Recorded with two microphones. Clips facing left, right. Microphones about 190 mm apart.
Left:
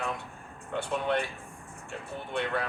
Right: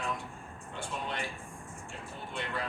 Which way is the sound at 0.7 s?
60° left (ahead or behind).